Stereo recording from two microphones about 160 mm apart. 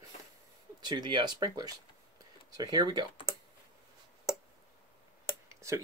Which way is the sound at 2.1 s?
25° right (ahead or behind).